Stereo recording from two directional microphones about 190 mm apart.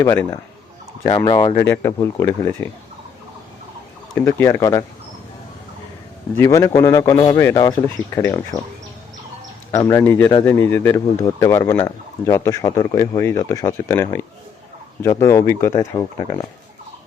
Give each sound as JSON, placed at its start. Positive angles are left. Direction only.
{"t": 0.0, "sound": "a man's voice", "side_deg": 15}
{"t": 1.6, "sound": "a man's voice", "side_deg": 10}
{"t": 4.1, "sound": "a man's voice", "side_deg": 15}
{"t": 6.3, "sound": "a man's voice", "side_deg": 15}
{"t": 9.7, "sound": "a man's voice", "side_deg": 15}